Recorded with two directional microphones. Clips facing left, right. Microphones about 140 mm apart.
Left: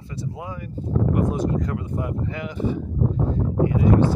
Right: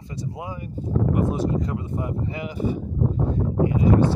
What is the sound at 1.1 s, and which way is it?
Speech, centre (ahead or behind).